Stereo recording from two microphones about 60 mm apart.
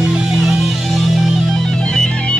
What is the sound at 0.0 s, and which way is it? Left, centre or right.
Music, centre.